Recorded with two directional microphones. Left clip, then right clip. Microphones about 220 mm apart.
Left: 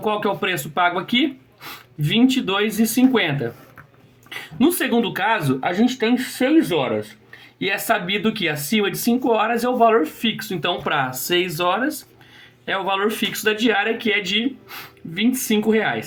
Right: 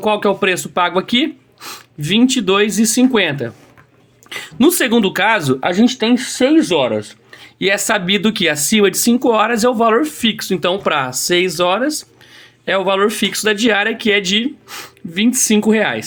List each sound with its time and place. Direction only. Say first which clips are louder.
0.0 s speech: right 6 dB; 45° right (ahead or behind)